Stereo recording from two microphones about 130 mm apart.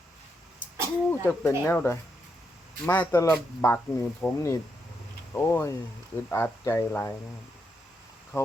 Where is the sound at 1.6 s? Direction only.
15° left (ahead or behind).